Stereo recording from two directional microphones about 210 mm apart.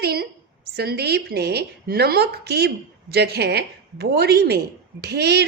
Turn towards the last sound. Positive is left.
turn(degrees=-50)  # may be behind; listen again after turning